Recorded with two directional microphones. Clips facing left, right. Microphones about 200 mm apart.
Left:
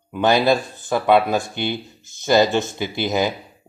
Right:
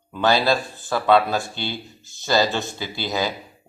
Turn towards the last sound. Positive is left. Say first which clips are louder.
# left 4 dB
turn(degrees=20)  # may be behind; listen again after turning